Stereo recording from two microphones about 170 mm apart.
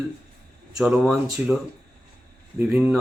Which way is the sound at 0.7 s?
Centre (ahead or behind).